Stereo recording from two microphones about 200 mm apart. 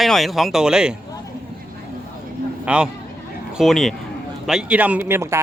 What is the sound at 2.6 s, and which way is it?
Speech, 5° right (ahead or behind).